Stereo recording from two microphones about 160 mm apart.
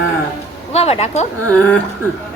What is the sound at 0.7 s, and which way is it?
Speech, 40° left (ahead or behind).